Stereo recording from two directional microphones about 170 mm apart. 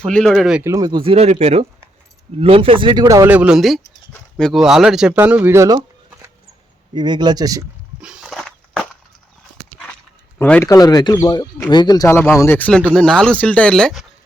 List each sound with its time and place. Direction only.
0.0 s speech: 5° left (ahead or behind)
0.6 s speech: 20° right (ahead or behind)
3.2 s speech: 10° right (ahead or behind)
6.9 s speech: 25° right (ahead or behind)
8.0 s walk: 5° right (ahead or behind)
10.3 s speech: 10° left (ahead or behind)